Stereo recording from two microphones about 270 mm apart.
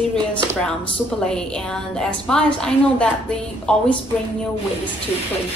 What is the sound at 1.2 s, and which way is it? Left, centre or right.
A woman's voice, centre.